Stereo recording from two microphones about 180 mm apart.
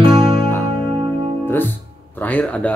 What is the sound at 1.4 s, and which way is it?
Speech, 10° left (ahead or behind).